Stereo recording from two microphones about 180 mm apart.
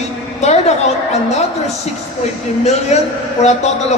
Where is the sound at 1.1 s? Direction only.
40° left (ahead or behind).